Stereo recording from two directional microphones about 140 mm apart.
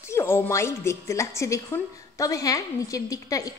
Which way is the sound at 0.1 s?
20° left (ahead or behind).